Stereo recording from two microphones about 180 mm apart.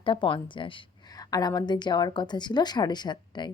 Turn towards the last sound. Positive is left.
turn(degrees=25)  # may be behind; listen again after turning